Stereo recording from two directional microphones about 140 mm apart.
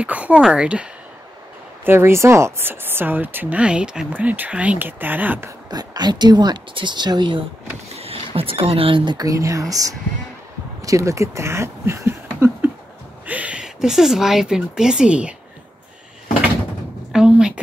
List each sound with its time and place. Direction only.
0.0 s speech: 10° right (ahead or behind)
1.9 s speech: 20° right (ahead or behind)
5.7 s speech: 30° right (ahead or behind)
7.9 s speech: 45° right (ahead or behind); by 15.3 s 10° right (ahead or behind)
17.1 s a sound: 5° right (ahead or behind)